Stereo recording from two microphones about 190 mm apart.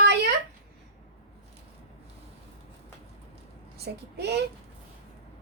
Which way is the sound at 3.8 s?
60° right (ahead or behind).